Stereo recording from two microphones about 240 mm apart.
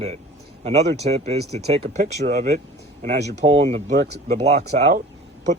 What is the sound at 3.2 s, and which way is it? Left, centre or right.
Speech, right.